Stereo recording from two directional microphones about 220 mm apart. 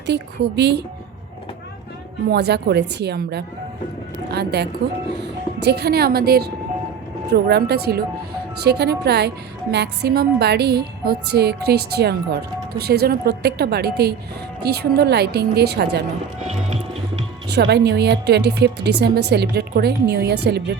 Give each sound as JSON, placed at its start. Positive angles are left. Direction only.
{"t": 0.0, "sound": "speech", "side_deg": -50}
{"t": 2.2, "sound": "speech", "side_deg": -50}
{"t": 17.5, "sound": "speech", "side_deg": -50}